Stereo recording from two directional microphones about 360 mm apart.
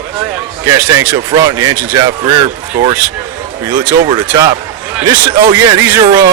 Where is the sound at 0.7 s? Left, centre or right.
Centre.